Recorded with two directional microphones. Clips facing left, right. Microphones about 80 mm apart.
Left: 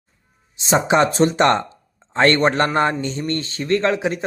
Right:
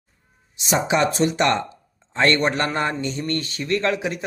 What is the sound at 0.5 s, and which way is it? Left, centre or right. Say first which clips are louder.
Speech: left 4 dB; left.